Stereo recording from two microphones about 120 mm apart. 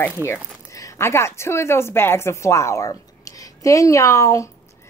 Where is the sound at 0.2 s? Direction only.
25° left (ahead or behind).